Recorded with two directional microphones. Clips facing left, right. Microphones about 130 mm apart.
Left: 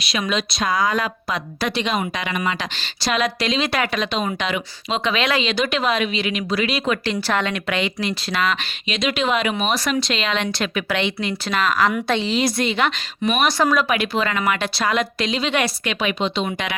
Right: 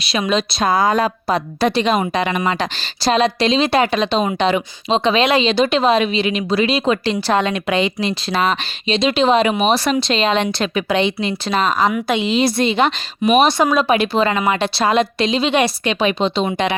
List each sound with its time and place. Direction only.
0.0 s speech: 30° right (ahead or behind)
11.9 s speech: 10° right (ahead or behind); by 16.7 s 30° right (ahead or behind)